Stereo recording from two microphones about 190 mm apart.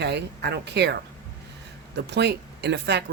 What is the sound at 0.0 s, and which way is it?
Speech, 60° right (ahead or behind).